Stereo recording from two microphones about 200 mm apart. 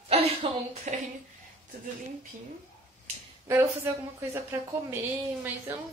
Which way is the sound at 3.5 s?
15° right (ahead or behind).